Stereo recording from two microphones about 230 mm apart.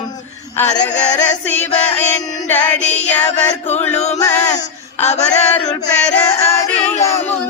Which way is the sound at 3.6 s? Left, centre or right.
Left.